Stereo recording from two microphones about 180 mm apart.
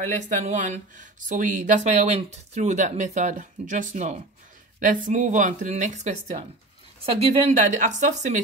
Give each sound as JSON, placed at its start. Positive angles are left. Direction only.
{"t": 0.1, "sound": "speech", "side_deg": -40}